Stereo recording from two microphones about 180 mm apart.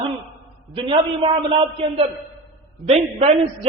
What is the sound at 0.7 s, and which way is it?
A man's voice, 30° right (ahead or behind).